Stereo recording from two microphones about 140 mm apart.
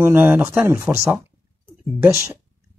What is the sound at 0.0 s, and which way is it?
Speech, 15° right (ahead or behind).